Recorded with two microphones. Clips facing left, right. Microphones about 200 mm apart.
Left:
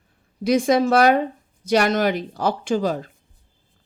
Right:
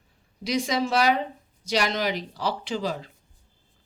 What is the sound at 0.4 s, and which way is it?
Speech, 50° left (ahead or behind).